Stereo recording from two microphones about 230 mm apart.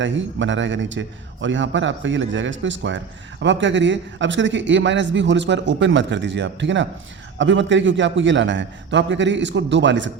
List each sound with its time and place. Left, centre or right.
0.0 s a man's voice: right